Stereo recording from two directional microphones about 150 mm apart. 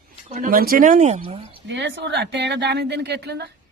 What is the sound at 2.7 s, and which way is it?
Speech, 90° right.